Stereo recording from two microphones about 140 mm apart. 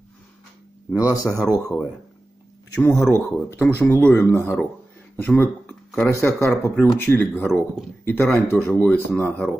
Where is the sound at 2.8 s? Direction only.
15° left (ahead or behind).